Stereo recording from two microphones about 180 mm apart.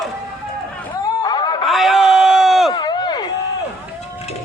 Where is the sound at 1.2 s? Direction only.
25° left (ahead or behind).